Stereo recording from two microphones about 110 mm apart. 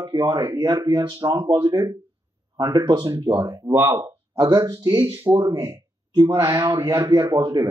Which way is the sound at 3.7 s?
25° right (ahead or behind).